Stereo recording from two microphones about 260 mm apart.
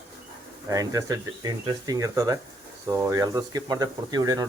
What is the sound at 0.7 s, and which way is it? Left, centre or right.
Speech, centre.